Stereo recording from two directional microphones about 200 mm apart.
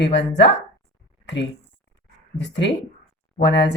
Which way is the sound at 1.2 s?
60° left (ahead or behind).